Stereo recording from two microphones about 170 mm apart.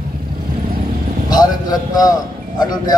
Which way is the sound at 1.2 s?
20° left (ahead or behind).